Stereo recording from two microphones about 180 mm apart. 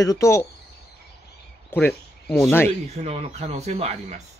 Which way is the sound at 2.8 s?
35° right (ahead or behind).